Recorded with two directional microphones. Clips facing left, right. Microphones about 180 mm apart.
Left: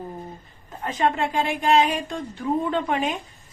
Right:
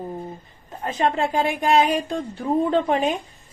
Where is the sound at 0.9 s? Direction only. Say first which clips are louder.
Right 1 dB; 35° right (ahead or behind).